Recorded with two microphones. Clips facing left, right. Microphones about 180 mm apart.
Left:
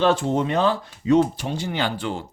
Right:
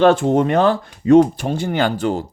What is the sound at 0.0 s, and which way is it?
Speech, 55° right (ahead or behind).